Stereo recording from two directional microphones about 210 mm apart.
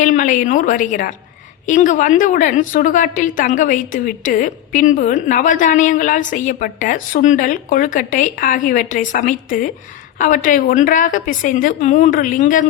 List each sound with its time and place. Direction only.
0.0 s a woman's voice: 35° left (ahead or behind)